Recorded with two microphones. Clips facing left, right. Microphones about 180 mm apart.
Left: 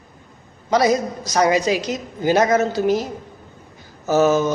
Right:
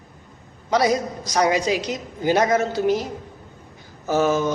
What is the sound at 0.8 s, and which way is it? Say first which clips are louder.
Speech: left 3 dB; 45° left (ahead or behind).